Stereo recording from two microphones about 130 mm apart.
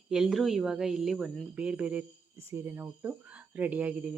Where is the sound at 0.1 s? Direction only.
5° right (ahead or behind).